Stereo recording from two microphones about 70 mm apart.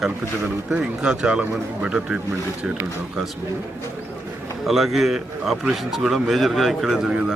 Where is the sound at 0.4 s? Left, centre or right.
Centre.